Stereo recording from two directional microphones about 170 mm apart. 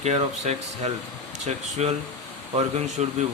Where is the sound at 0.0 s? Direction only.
40° right (ahead or behind).